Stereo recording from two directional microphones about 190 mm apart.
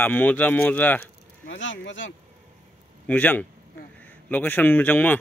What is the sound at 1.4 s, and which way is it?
Speech, 80° left.